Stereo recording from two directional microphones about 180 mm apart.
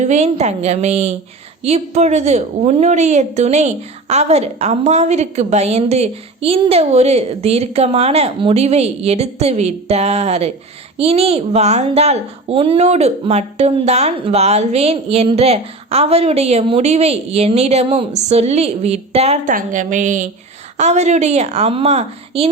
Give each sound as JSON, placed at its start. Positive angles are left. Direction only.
{"t": 0.0, "sound": "a woman's voice", "side_deg": -40}